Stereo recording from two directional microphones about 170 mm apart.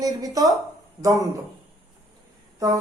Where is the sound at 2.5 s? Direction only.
20° right (ahead or behind).